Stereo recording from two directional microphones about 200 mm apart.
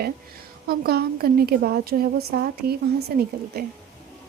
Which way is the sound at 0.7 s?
50° right (ahead or behind).